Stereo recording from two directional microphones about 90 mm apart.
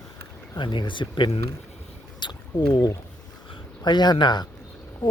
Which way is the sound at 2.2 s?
55° left (ahead or behind).